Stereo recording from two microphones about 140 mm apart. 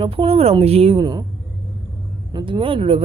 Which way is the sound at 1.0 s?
30° right (ahead or behind).